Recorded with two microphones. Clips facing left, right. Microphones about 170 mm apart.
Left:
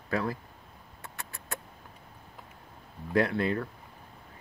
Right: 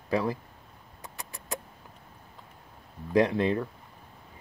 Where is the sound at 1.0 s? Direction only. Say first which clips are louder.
Right 1 dB; 15° right (ahead or behind).